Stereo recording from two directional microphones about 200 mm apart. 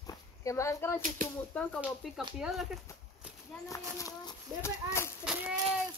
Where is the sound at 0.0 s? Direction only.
15° left (ahead or behind).